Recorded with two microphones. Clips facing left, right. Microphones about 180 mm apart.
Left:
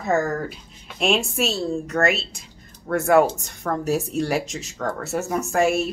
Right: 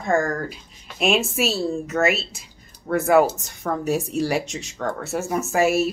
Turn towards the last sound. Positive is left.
turn(degrees=-5)  # may be behind; listen again after turning